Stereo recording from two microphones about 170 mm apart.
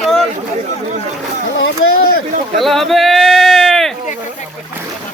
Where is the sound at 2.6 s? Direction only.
Centre (ahead or behind).